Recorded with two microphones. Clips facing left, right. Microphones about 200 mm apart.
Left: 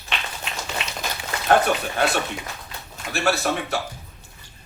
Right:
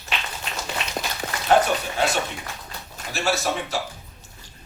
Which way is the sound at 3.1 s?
60° left (ahead or behind).